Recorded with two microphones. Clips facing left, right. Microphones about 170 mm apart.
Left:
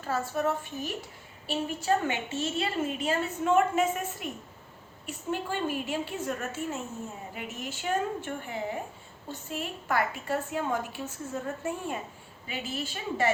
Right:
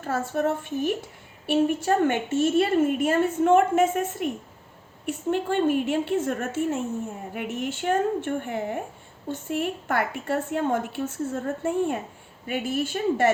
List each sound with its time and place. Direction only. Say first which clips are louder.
0.0 s a woman's voice: right 4 dB; 50° right (ahead or behind)